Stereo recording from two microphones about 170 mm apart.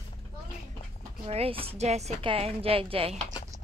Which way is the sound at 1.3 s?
35° right (ahead or behind).